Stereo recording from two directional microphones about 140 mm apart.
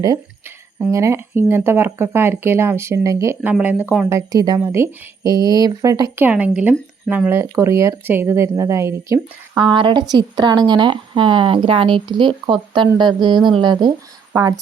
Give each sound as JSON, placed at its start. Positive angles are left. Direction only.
{"t": 0.9, "sound": "speech", "side_deg": -20}
{"t": 4.1, "sound": "speech", "side_deg": -25}
{"t": 9.6, "sound": "speech", "side_deg": -35}